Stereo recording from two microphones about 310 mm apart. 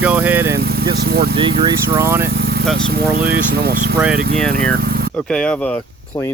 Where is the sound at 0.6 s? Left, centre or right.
Right.